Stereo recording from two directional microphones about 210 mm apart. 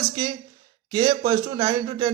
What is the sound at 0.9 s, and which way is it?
Speech, 20° right (ahead or behind).